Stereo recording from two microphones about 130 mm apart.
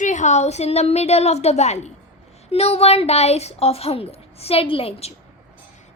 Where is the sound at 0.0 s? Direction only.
70° left (ahead or behind).